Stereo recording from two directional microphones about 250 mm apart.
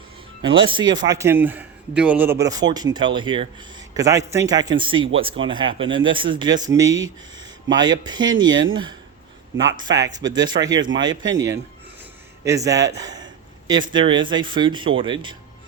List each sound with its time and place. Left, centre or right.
0.4 s a man's voice: centre
12.5 s a man's voice: centre